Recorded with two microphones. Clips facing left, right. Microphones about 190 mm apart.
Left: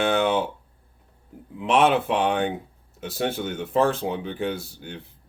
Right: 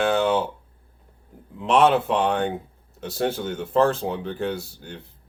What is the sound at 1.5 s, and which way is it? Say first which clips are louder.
Speech: right 1 dB; 5° left (ahead or behind).